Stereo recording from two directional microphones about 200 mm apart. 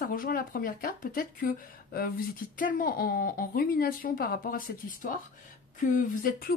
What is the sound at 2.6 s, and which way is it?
Speech, 45° left (ahead or behind).